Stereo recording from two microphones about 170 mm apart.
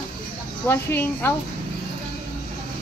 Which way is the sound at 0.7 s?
10° left (ahead or behind).